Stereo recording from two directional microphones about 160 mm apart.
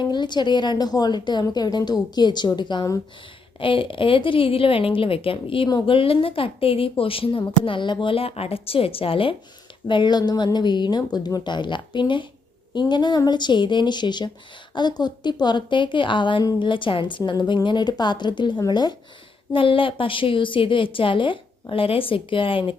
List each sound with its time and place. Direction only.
0.0 s a woman's voice: 30° left (ahead or behind)